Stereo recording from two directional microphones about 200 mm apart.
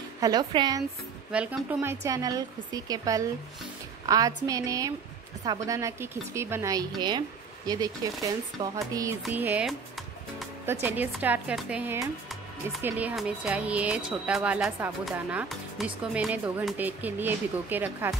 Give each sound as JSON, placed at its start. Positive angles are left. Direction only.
{"t": 0.2, "sound": "a woman's voice", "side_deg": -20}
{"t": 1.3, "sound": "a woman's voice", "side_deg": -5}